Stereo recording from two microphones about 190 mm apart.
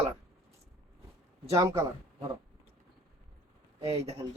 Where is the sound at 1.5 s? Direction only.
15° right (ahead or behind).